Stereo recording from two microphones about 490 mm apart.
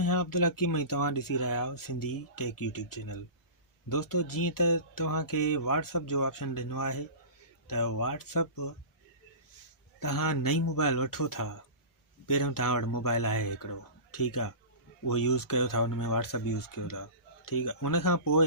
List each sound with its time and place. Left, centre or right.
0.0 s speech: left
10.0 s speech: left